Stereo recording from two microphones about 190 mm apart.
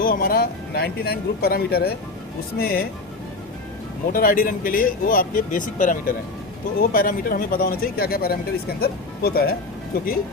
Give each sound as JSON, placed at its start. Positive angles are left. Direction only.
{"t": 0.0, "sound": "a man's voice", "side_deg": 50}
{"t": 4.1, "sound": "a man's voice", "side_deg": 50}